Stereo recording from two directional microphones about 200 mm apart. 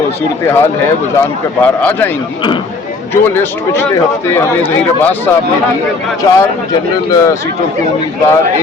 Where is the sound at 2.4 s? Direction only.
25° left (ahead or behind).